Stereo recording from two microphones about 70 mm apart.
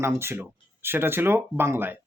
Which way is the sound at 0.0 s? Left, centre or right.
Right.